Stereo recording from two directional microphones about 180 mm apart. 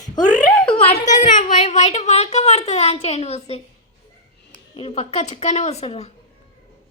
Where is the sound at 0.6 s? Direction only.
30° left (ahead or behind).